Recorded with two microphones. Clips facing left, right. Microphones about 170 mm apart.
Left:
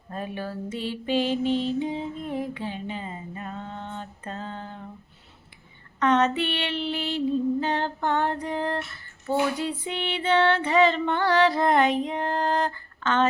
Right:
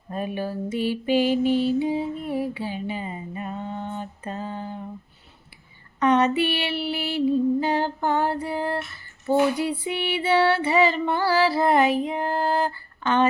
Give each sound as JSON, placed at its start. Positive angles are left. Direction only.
{"t": 0.1, "sound": "mantra", "side_deg": -15}
{"t": 6.0, "sound": "female singing", "side_deg": -10}